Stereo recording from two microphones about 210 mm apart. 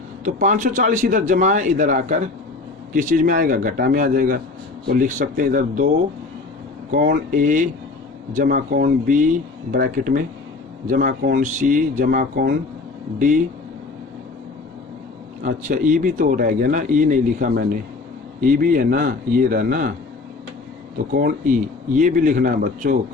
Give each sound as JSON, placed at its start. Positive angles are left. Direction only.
{"t": 0.3, "sound": "speech", "side_deg": -40}
{"t": 6.9, "sound": "speech", "side_deg": -45}
{"t": 15.4, "sound": "a man's voice", "side_deg": -40}
{"t": 21.1, "sound": "a man's voice", "side_deg": -45}